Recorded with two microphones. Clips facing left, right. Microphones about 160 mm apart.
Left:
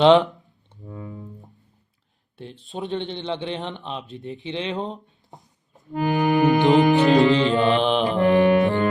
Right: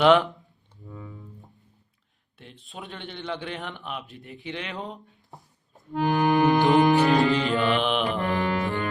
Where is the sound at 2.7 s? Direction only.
25° left (ahead or behind).